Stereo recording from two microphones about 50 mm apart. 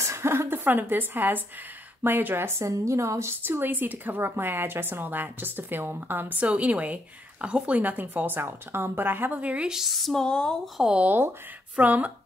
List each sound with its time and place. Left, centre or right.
0.0 s a woman's voice: right
0.7 s a woman's voice: right
2.6 s a woman's voice: right
3.4 s a woman's voice: right
9.4 s speech: right
9.7 s a sound: centre
10.1 s speech: centre
11.7 s a woman's voice: right